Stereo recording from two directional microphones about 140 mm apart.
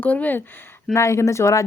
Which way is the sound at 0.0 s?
10° left (ahead or behind).